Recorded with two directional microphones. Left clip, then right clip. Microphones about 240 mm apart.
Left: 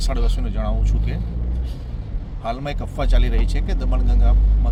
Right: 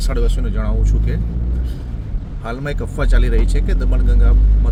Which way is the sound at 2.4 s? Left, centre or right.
Right.